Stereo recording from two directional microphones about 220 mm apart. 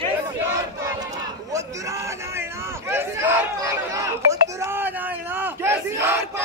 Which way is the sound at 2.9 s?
10° right (ahead or behind).